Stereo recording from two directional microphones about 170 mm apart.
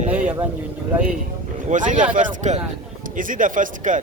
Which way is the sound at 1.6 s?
50° right (ahead or behind).